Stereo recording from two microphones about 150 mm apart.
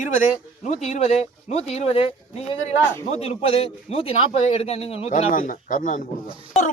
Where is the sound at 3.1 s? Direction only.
45° left (ahead or behind).